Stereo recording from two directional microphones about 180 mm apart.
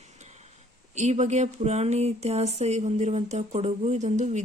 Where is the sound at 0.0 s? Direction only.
40° right (ahead or behind).